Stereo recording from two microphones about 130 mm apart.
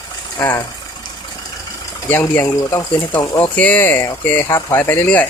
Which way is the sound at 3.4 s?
15° left (ahead or behind).